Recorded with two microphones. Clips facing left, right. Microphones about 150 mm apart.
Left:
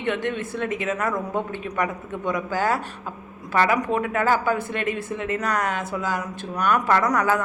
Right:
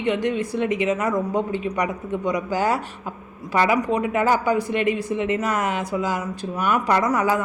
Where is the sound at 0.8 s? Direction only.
20° right (ahead or behind).